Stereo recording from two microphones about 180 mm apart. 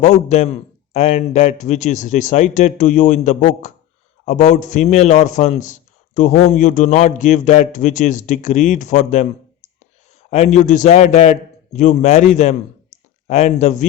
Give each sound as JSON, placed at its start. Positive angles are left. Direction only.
{"t": 0.0, "sound": "a man's voice", "side_deg": 40}
{"t": 10.2, "sound": "a man's voice", "side_deg": 35}